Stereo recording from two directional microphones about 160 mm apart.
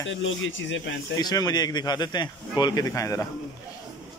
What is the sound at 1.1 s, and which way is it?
Speech, 25° left (ahead or behind).